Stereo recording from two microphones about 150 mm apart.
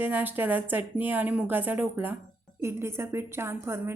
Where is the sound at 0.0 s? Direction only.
10° right (ahead or behind).